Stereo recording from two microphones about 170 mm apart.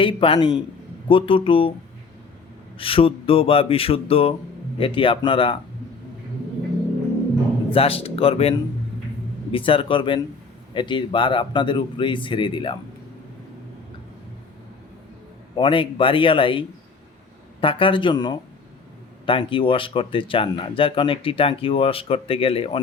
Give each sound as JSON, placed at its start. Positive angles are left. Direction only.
{"t": 0.0, "sound": "speech", "side_deg": 30}
{"t": 2.7, "sound": "speech", "side_deg": 30}
{"t": 7.7, "sound": "speech", "side_deg": 35}
{"t": 15.5, "sound": "speech", "side_deg": 30}